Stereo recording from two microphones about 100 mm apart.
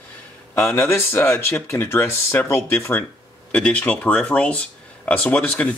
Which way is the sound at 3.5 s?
10° left (ahead or behind).